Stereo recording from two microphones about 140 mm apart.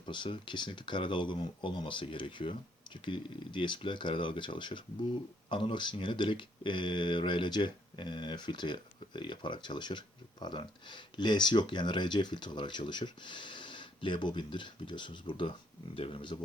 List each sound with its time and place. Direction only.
0.0 s speech: 35° left (ahead or behind)